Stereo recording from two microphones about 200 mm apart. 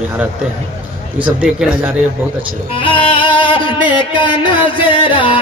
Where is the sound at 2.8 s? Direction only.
25° left (ahead or behind).